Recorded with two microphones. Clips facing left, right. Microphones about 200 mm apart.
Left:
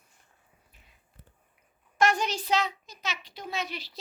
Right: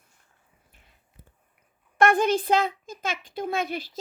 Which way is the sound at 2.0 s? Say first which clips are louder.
Right 6 dB; 55° right (ahead or behind).